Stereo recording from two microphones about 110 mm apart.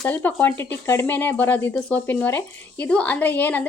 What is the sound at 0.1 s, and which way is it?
Speech, 15° left (ahead or behind).